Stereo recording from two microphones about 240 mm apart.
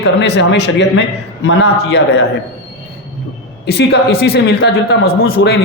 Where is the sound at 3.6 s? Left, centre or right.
Left.